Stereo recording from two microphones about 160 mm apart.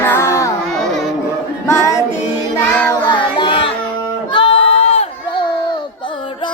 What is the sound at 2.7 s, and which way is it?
Child singing, 5° left (ahead or behind).